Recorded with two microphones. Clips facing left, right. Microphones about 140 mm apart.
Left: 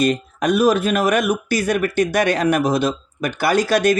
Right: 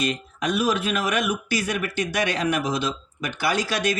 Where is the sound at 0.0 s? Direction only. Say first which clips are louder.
Left 8 dB; 50° left (ahead or behind).